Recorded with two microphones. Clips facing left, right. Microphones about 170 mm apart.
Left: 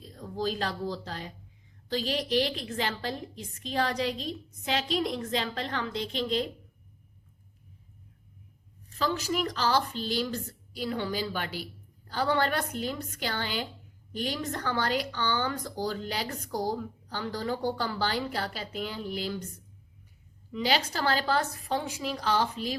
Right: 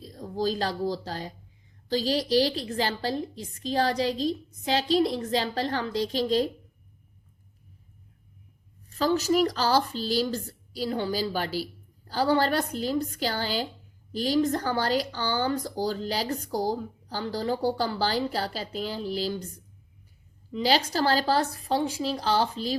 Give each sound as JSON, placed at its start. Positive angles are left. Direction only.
{"t": 0.0, "sound": "speech", "side_deg": -35}
{"t": 9.0, "sound": "speech", "side_deg": -40}
{"t": 20.5, "sound": "speech", "side_deg": -35}